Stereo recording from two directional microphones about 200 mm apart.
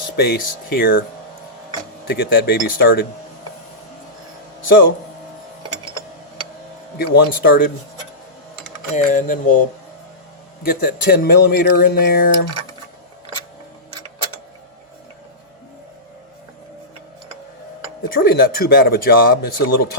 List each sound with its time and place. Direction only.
0.2 s speech: 50° left (ahead or behind)
2.0 s speech: 50° left (ahead or behind)
7.0 s speech: 50° left (ahead or behind)
9.0 s speech: 40° left (ahead or behind)
18.1 s speech: 45° left (ahead or behind)